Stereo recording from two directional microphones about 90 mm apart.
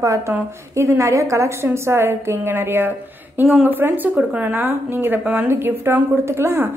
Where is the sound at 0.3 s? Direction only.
20° right (ahead or behind).